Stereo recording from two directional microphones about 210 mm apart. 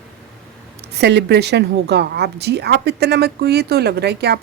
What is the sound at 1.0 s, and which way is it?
Speech, 55° right (ahead or behind).